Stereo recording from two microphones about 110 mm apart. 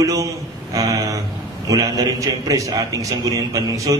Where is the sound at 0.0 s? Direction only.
30° right (ahead or behind).